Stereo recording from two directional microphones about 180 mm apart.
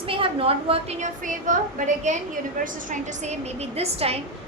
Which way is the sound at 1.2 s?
45° right (ahead or behind).